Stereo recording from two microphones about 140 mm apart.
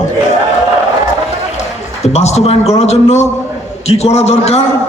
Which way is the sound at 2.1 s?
50° left (ahead or behind).